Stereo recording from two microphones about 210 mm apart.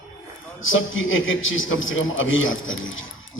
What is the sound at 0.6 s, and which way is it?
A man's voice, 65° left (ahead or behind).